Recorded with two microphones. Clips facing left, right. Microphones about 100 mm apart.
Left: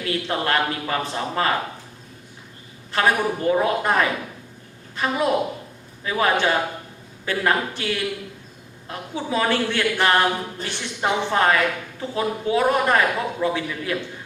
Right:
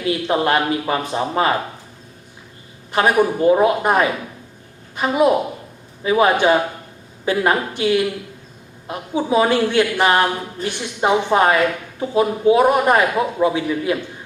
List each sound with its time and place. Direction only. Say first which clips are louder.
0.0 s a man's voice: right 6 dB; 15° right (ahead or behind)
2.9 s a man's voice: right 5 dB; 15° right (ahead or behind)